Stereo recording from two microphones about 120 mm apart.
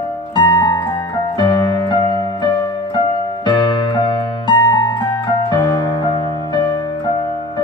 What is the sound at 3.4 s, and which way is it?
Music, 40° left (ahead or behind).